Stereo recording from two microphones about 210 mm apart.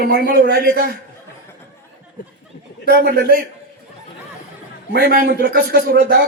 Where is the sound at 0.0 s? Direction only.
45° right (ahead or behind).